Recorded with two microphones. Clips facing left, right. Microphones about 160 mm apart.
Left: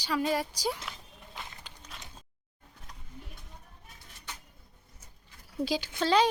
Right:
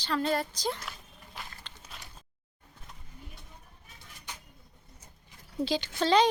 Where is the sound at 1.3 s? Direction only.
20° left (ahead or behind).